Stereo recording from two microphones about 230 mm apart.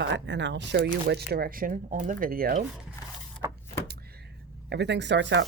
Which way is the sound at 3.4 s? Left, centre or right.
Centre.